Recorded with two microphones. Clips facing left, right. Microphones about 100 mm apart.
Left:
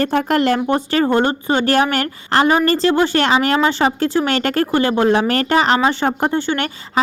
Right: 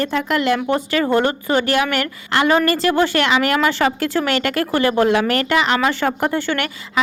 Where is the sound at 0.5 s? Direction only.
30° left (ahead or behind).